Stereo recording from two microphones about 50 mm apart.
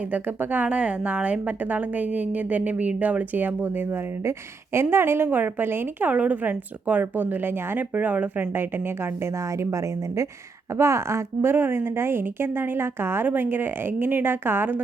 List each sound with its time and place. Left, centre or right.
0.0 s a woman's voice: right
0.7 s a woman's voice: right
3.8 s a woman's voice: right
6.1 s a woman's voice: right
7.9 s a woman's voice: right
8.5 s a woman's voice: right
9.3 s speech: right
10.7 s a woman's voice: right
11.5 s a woman's voice: right